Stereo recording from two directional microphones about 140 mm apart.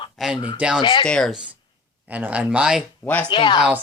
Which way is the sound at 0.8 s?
35° left (ahead or behind).